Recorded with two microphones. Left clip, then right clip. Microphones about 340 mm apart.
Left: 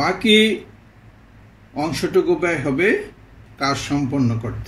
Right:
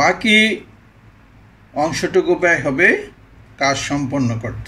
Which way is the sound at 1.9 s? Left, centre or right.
Right.